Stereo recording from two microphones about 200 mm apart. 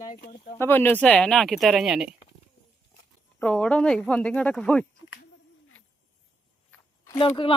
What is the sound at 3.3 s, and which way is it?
Speech, 5° left (ahead or behind).